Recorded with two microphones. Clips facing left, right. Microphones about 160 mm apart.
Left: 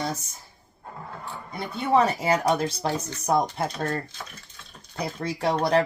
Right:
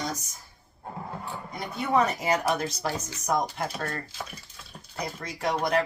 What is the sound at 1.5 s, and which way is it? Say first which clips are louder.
Speech: left 3 dB; 30° left (ahead or behind).